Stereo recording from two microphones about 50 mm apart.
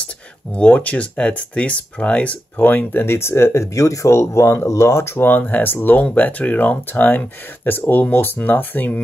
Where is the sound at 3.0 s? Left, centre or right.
Left.